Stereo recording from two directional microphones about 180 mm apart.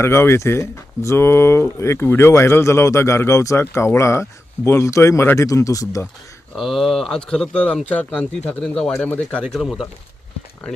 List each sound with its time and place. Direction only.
0.0 s speech: 15° left (ahead or behind)
6.6 s speech: centre (ahead or behind)